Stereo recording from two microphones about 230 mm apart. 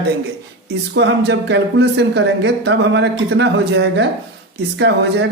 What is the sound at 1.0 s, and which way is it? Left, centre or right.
A man's voice, right.